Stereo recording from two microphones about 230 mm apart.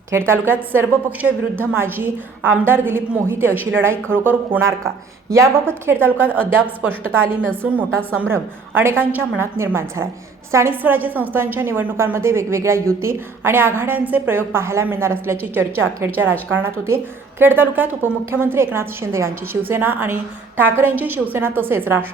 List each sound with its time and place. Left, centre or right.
0.1 s a woman's voice: centre